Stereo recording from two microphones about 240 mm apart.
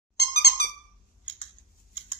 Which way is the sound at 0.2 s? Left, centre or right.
Left.